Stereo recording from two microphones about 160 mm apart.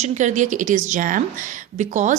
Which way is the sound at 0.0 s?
45° right (ahead or behind).